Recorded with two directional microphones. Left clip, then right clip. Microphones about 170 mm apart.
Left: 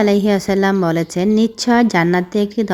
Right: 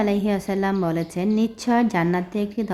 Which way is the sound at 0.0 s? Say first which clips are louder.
Left 8 dB; 30° left (ahead or behind).